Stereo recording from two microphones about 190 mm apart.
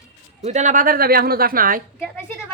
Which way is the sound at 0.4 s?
40° right (ahead or behind).